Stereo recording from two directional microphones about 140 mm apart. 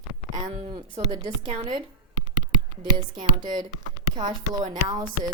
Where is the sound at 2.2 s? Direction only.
60° right (ahead or behind).